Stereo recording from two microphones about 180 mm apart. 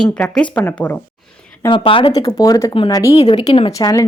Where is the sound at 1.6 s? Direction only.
30° left (ahead or behind).